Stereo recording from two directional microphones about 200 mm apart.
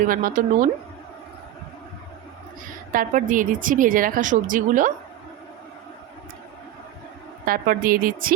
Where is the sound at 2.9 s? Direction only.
40° right (ahead or behind).